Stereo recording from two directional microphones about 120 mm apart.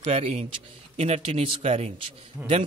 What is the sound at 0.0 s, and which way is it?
A man's voice, 60° right (ahead or behind).